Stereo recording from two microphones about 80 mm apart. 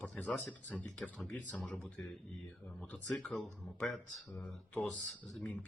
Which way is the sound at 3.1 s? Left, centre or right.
Centre.